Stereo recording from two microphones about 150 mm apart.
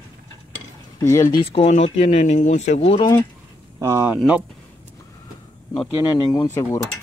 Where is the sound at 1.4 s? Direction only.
40° left (ahead or behind).